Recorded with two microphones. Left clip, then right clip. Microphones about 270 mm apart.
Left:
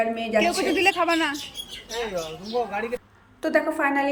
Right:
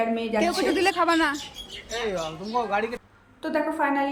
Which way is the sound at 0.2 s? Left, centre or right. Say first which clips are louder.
Left 2 dB; centre.